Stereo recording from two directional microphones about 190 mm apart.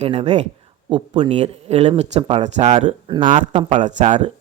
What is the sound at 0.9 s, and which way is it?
Speech, 25° right (ahead or behind).